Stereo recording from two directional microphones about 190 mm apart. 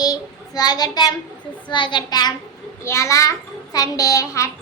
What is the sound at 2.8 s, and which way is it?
A child's voice, 15° left (ahead or behind).